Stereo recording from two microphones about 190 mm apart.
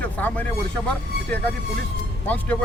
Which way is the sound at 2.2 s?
10° left (ahead or behind).